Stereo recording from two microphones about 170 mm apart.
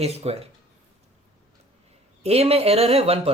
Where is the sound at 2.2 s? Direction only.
35° right (ahead or behind).